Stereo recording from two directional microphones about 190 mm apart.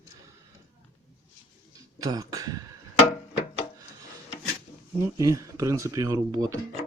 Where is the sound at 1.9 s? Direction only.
20° right (ahead or behind).